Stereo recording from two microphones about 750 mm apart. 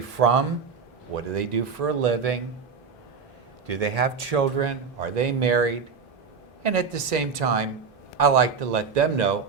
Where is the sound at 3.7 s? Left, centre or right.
Right.